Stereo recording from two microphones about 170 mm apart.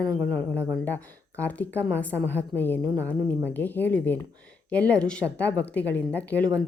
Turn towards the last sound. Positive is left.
turn(degrees=10)  # may be behind; listen again after turning